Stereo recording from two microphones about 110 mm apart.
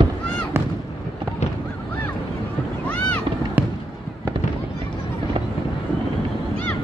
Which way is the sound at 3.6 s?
15° right (ahead or behind).